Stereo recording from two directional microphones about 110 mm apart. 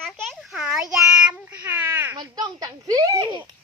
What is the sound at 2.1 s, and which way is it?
Speech, 35° right (ahead or behind).